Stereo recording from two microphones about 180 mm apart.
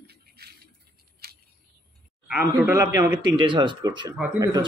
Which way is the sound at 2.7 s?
15° right (ahead or behind).